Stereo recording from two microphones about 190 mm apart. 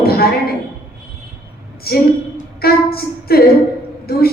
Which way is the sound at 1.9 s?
55° left (ahead or behind).